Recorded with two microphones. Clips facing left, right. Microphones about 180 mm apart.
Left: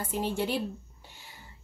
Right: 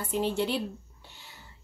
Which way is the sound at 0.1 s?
10° left (ahead or behind).